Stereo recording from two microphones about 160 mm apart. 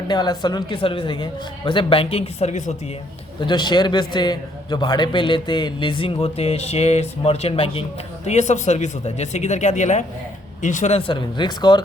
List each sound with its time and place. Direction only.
0.1 s a man's voice: 25° left (ahead or behind); by 2.7 s 50° left (ahead or behind)
3.4 s a man's voice: 25° left (ahead or behind)